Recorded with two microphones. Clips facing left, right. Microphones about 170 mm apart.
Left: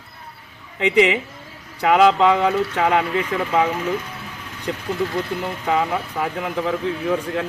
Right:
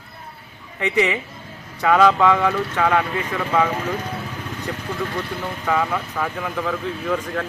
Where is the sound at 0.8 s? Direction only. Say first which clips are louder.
Left 4 dB; 15° left (ahead or behind).